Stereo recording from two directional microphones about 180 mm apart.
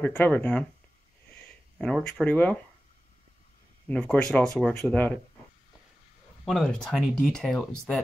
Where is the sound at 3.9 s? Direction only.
5° left (ahead or behind).